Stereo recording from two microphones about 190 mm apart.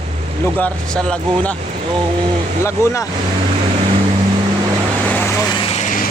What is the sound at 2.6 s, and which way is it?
Speech, 15° left (ahead or behind).